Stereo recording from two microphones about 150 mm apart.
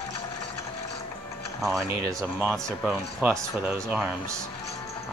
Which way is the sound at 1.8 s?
20° right (ahead or behind).